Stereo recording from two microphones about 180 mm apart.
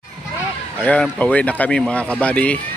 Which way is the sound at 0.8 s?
5° left (ahead or behind).